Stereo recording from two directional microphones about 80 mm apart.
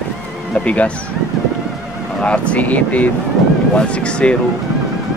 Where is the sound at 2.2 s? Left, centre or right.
Centre.